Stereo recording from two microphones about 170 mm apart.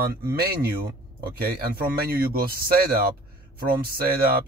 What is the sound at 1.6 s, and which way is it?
Speech, 60° right (ahead or behind).